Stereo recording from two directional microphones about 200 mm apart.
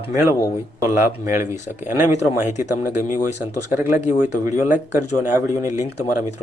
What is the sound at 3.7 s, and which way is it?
Speech, 10° right (ahead or behind).